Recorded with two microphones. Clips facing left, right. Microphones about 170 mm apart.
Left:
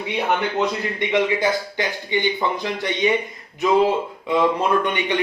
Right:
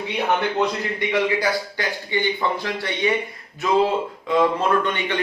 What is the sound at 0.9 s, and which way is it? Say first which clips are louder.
Speech: left 2 dB; 20° left (ahead or behind).